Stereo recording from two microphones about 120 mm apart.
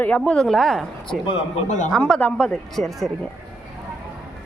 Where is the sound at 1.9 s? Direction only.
5° left (ahead or behind).